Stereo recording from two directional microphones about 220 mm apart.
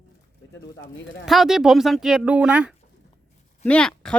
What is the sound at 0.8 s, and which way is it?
Speech, 60° left (ahead or behind).